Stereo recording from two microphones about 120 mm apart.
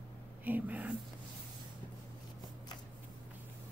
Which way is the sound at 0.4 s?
15° right (ahead or behind).